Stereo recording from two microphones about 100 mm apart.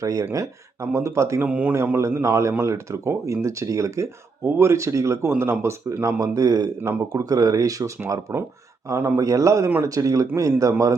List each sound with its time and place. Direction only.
0.0 s a man's voice: 35° right (ahead or behind)
1.5 s speech: 15° right (ahead or behind)
1.7 s a man's voice: 25° right (ahead or behind)
6.8 s speech: 25° right (ahead or behind)
7.3 s a man's voice: 35° right (ahead or behind)